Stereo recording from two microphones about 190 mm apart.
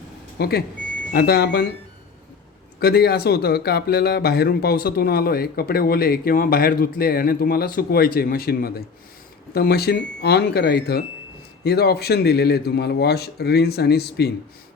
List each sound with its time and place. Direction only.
0.3 s a man's voice: 55° left (ahead or behind)
2.8 s a man's voice: 55° left (ahead or behind)